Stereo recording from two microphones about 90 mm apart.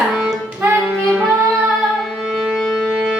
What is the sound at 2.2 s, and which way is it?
Music, 5° right (ahead or behind).